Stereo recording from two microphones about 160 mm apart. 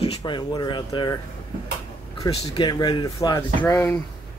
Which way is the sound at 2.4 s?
30° left (ahead or behind).